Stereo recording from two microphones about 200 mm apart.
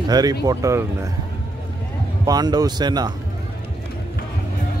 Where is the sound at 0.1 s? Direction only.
20° right (ahead or behind).